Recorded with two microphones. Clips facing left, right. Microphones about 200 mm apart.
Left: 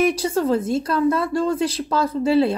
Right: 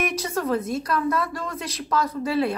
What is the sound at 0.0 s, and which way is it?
Speech, 30° left (ahead or behind).